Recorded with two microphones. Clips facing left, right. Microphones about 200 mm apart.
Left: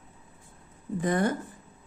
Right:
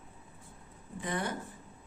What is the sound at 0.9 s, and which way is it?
Speech, 45° left (ahead or behind).